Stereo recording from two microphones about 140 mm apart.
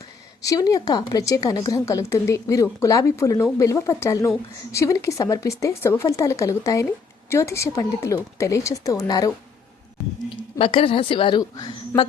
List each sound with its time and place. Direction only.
0.4 s a woman's voice: 25° left (ahead or behind)
10.6 s a woman's voice: 40° left (ahead or behind)